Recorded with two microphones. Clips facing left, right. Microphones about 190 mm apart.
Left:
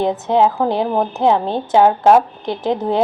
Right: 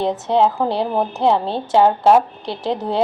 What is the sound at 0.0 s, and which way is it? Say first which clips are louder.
A woman's voice: left 2 dB; 5° left (ahead or behind).